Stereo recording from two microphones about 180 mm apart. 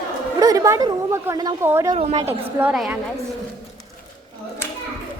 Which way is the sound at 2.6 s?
5° right (ahead or behind).